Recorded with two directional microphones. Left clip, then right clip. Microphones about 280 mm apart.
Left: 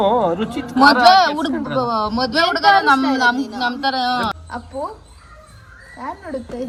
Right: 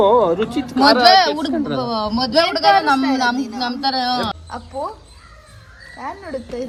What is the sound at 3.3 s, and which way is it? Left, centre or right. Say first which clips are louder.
Speech: even; right.